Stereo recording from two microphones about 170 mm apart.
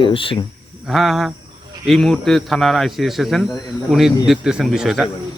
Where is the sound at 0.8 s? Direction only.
Centre (ahead or behind).